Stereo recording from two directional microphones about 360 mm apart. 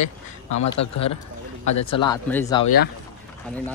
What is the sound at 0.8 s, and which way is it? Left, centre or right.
Speech, left.